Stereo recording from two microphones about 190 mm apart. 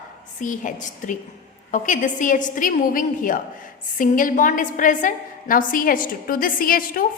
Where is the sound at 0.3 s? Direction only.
40° left (ahead or behind).